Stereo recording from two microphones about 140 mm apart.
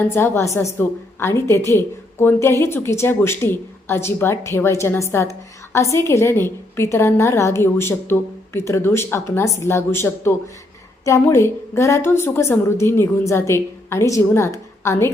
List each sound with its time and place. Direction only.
0.0 s a woman's voice: 15° left (ahead or behind)